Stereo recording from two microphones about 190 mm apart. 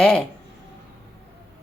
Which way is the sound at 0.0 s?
5° left (ahead or behind).